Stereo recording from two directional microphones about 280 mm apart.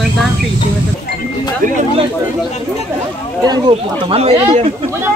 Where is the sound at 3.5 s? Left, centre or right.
Centre.